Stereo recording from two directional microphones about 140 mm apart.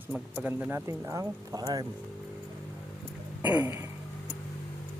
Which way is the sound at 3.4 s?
10° right (ahead or behind).